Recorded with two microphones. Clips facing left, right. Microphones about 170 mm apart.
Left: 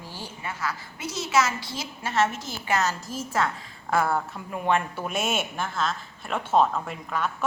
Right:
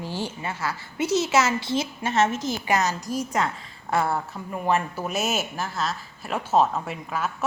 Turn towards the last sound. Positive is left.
turn(degrees=-5)  # may be behind; listen again after turning